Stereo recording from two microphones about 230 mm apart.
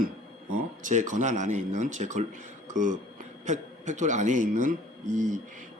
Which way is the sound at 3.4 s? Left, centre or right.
Right.